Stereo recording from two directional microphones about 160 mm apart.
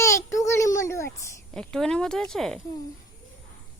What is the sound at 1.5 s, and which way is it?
Speech, 5° left (ahead or behind).